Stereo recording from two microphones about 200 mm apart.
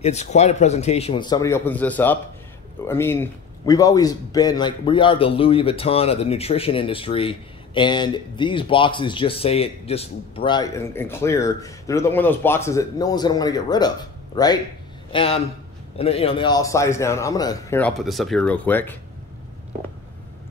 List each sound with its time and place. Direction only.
0.0 s a man's voice: 35° left (ahead or behind); by 18.9 s 10° left (ahead or behind)